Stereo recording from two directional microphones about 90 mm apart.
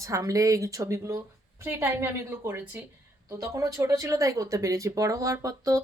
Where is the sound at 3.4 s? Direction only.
40° right (ahead or behind).